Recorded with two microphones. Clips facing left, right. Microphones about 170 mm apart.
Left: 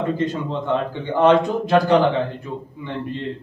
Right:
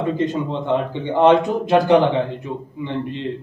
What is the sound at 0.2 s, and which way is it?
A man's voice, 20° right (ahead or behind).